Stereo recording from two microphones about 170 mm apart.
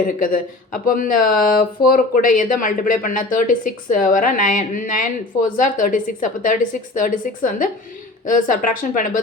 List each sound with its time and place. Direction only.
0.2 s speech: 55° left (ahead or behind)